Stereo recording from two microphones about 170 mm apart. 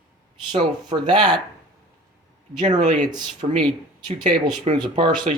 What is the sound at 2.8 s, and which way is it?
Speech, 45° right (ahead or behind).